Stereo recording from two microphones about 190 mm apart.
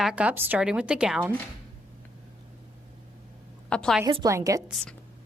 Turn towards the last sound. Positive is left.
turn(degrees=-15)  # may be behind; listen again after turning